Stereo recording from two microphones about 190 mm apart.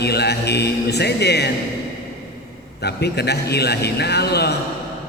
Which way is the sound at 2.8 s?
60° left (ahead or behind).